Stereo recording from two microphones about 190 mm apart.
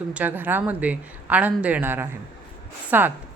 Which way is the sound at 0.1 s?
10° right (ahead or behind).